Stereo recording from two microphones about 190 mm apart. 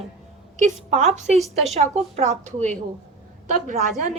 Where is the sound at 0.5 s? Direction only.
40° right (ahead or behind).